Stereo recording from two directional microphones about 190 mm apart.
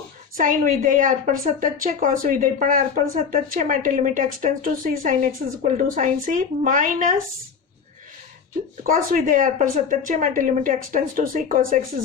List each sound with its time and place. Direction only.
0.3 s a woman's voice: 45° right (ahead or behind)
8.8 s a woman's voice: 50° right (ahead or behind)